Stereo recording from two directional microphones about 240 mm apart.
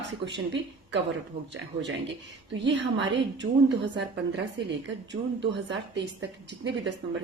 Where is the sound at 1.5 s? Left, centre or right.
Right.